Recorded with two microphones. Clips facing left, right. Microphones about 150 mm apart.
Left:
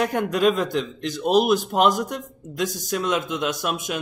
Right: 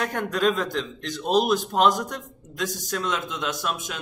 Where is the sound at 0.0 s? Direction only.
10° left (ahead or behind).